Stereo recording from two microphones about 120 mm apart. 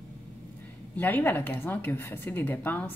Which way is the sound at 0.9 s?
15° left (ahead or behind).